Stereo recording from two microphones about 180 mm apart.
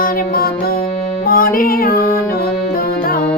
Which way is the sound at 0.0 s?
55° left (ahead or behind).